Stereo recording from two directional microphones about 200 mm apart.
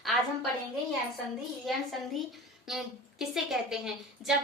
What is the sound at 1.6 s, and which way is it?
A woman's voice, centre (ahead or behind).